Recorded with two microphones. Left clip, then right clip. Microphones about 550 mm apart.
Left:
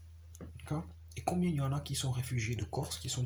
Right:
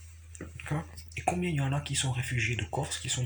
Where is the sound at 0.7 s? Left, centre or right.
Left.